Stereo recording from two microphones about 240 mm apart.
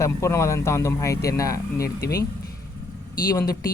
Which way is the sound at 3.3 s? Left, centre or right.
Centre.